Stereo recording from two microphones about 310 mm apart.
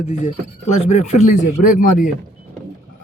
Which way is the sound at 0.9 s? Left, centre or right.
Left.